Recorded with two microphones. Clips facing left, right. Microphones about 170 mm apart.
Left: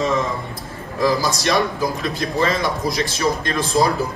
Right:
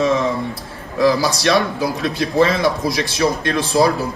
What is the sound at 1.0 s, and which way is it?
Speech, 70° right (ahead or behind).